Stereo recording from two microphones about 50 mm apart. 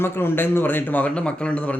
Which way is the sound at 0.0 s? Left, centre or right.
Left.